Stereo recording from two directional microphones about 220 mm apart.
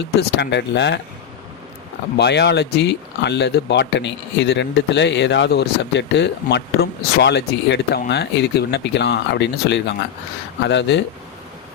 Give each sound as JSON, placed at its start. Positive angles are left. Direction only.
{"t": 0.0, "sound": "speech", "side_deg": 50}
{"t": 2.1, "sound": "speech", "side_deg": 50}